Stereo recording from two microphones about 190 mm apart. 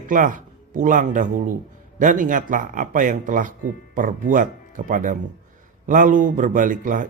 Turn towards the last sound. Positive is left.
turn(degrees=-45)  # may be behind; listen again after turning